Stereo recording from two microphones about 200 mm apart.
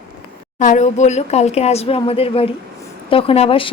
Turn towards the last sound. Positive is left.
turn(degrees=30)  # may be behind; listen again after turning